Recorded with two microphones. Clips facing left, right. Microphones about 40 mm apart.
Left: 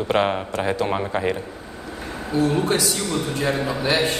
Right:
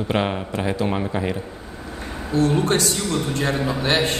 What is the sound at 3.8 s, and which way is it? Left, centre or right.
Speech, right.